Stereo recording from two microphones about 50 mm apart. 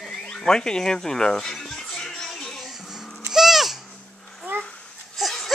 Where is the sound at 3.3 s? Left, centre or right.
Centre.